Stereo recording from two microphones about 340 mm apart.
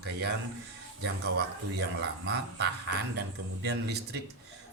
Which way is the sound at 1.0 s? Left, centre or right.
Right.